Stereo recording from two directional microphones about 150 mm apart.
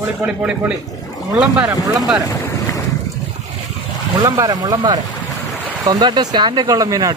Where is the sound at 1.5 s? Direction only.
25° right (ahead or behind).